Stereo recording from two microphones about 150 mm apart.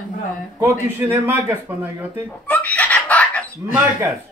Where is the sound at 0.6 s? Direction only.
10° right (ahead or behind).